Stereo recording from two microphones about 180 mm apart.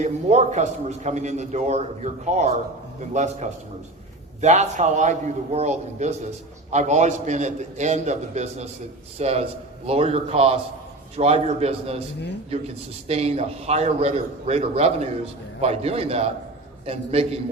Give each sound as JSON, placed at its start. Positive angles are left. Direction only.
{"t": 0.0, "sound": "a man's voice", "side_deg": -40}
{"t": 13.1, "sound": "a man's voice", "side_deg": -35}